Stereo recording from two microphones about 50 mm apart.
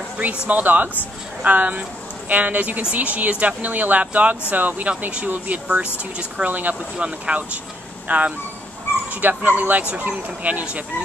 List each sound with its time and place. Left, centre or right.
0.5 s a woman's voice: right